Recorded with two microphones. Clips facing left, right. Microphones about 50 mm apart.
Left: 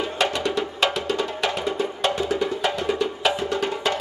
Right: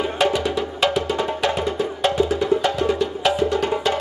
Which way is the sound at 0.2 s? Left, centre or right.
Centre.